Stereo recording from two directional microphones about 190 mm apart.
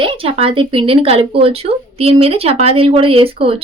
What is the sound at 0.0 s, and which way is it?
Speech, 30° right (ahead or behind).